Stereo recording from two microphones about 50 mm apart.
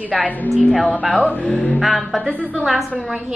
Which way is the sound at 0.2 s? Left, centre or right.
Left.